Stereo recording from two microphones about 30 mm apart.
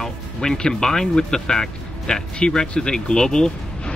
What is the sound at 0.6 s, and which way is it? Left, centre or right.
Speech, left.